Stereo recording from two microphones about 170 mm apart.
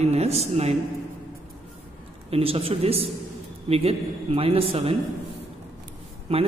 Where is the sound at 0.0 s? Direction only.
40° right (ahead or behind).